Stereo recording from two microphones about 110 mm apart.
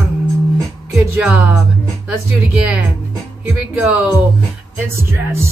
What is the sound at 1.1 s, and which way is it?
Music, 15° right (ahead or behind).